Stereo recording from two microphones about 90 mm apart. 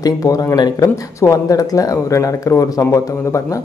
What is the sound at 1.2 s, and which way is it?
Speech, 40° left (ahead or behind).